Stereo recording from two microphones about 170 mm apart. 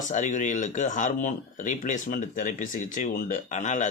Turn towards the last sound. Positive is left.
turn(degrees=45)  # may be behind; listen again after turning